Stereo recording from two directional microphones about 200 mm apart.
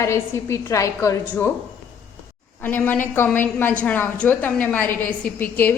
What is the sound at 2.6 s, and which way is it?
A woman's voice, 10° left (ahead or behind).